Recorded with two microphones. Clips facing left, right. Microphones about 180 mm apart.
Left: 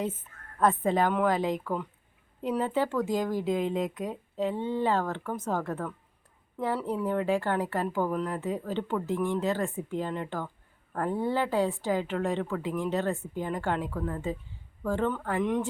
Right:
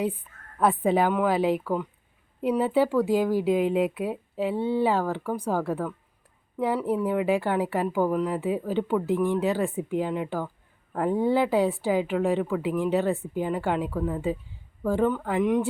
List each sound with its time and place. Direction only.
0.6 s speech: 15° right (ahead or behind)